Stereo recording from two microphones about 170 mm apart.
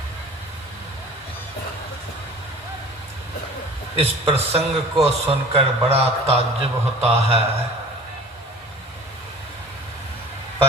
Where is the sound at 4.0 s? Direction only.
35° right (ahead or behind).